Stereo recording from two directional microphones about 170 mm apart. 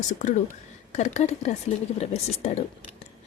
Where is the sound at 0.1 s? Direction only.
45° left (ahead or behind).